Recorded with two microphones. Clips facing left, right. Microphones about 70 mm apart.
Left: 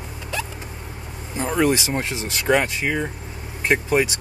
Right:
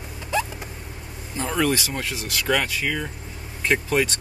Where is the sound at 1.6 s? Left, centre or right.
Left.